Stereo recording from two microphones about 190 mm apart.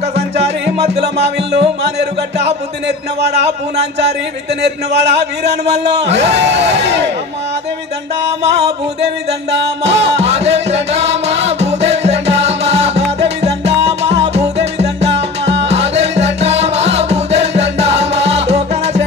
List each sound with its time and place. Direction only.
0.7 s music: 35° right (ahead or behind)
1.0 s music: 60° right (ahead or behind)
3.2 s music: 65° right (ahead or behind)
4.6 s music: 60° right (ahead or behind)
6.8 s music: 65° right (ahead or behind)
9.5 s music: 70° right (ahead or behind)
10.1 s music: 35° right (ahead or behind)